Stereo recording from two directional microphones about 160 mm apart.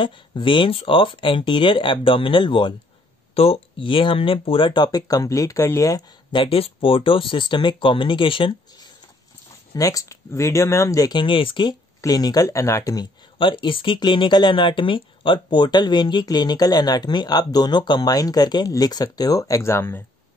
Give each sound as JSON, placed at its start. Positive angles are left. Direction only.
{"t": 0.0, "sound": "speech", "side_deg": 30}